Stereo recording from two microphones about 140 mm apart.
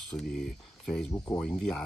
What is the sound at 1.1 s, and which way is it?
Speech, 20° left (ahead or behind).